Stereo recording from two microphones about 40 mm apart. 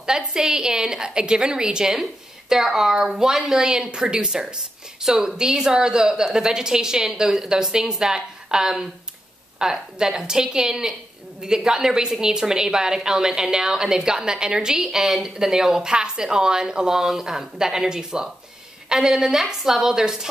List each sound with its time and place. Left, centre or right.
0.0 s a woman's voice: centre